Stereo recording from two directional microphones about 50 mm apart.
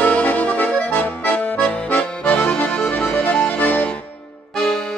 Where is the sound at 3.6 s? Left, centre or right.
Left.